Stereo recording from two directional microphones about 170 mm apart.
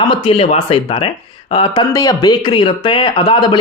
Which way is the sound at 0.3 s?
35° left (ahead or behind).